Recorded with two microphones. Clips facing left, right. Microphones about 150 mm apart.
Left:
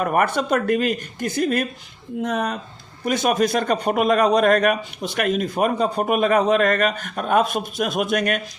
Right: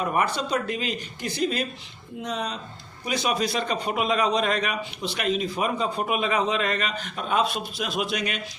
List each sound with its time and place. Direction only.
0.0 s a man's voice: 55° left (ahead or behind)